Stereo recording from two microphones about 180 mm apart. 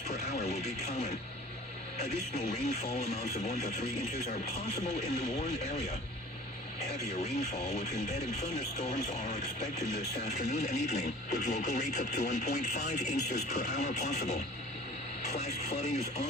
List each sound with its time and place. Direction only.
0.1 s television: 40° left (ahead or behind)
2.9 s speech: 35° left (ahead or behind)